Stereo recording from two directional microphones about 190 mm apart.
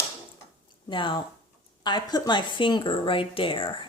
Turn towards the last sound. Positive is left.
turn(degrees=25)  # may be behind; listen again after turning